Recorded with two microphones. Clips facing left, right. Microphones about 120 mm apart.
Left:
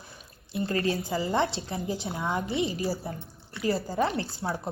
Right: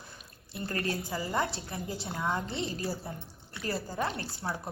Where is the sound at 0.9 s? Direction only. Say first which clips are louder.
Left 6 dB; 25° left (ahead or behind).